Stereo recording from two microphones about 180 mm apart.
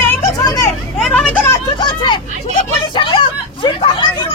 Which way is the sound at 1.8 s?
25° left (ahead or behind).